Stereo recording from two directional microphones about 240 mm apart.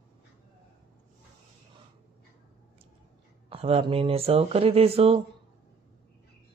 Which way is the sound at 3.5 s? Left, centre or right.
Right.